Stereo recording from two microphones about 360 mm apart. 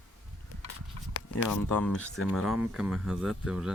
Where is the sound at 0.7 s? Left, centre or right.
Left.